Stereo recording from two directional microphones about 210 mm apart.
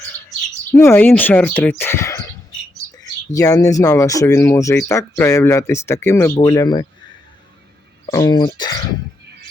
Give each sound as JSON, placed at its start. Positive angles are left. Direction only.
{"t": 0.7, "sound": "speech", "side_deg": 10}
{"t": 3.3, "sound": "speech", "side_deg": 15}
{"t": 8.1, "sound": "speech", "side_deg": 20}